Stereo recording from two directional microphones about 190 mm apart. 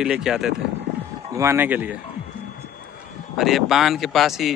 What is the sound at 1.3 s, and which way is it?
Speech, 10° right (ahead or behind).